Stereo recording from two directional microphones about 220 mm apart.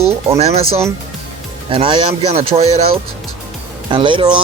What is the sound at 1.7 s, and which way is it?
Speech, 25° right (ahead or behind).